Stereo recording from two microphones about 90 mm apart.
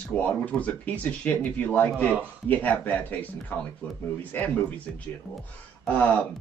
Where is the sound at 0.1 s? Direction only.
15° left (ahead or behind).